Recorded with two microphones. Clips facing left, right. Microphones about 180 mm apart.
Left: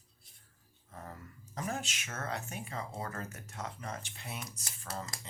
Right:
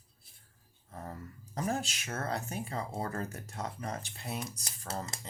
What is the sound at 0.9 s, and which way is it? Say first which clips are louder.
A child's voice: right 4 dB; 35° right (ahead or behind).